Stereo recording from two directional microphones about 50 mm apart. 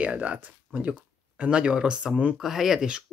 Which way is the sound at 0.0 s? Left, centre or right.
Right.